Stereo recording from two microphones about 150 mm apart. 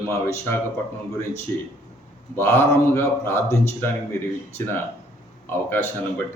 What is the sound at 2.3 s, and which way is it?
Speech, 15° left (ahead or behind).